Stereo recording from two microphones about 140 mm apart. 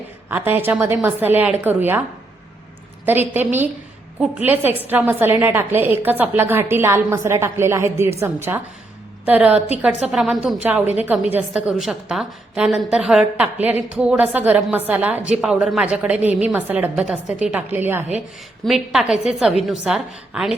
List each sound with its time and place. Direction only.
0.3 s a woman's voice: 15° right (ahead or behind)
3.1 s a woman's voice: 15° right (ahead or behind)
18.6 s a woman's voice: 5° right (ahead or behind)